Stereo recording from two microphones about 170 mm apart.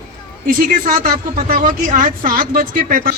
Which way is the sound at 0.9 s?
55° right (ahead or behind).